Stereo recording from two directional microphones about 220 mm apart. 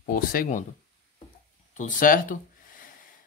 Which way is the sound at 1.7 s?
35° left (ahead or behind).